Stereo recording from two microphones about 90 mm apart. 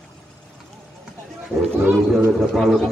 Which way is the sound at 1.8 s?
25° right (ahead or behind).